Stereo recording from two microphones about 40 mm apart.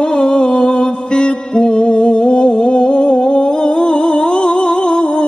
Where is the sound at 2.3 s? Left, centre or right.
Left.